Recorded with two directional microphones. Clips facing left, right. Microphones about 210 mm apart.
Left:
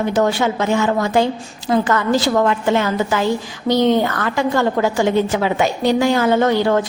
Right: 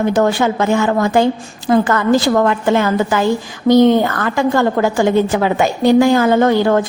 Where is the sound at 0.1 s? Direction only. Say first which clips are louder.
Right 3 dB; 50° right (ahead or behind).